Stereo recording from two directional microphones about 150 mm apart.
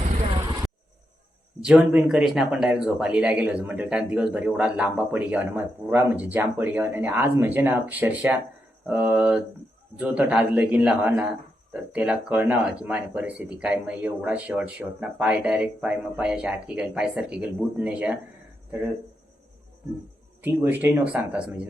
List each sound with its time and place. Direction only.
0.3 s vehicle: 30° right (ahead or behind)
1.6 s speech: 10° right (ahead or behind)
20.4 s speech: 15° right (ahead or behind)